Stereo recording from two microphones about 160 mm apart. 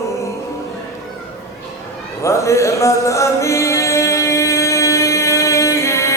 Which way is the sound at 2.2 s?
20° left (ahead or behind).